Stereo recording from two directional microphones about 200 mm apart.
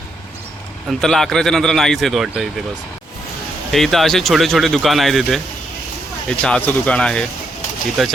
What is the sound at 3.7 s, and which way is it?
Speech, centre (ahead or behind).